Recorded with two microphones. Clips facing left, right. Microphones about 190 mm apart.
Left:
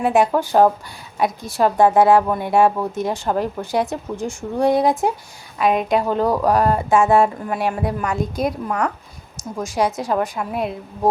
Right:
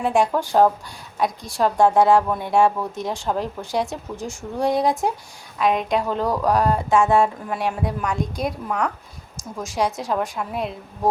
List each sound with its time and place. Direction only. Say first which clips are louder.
0.0 s speech: left 3 dB; 5° left (ahead or behind)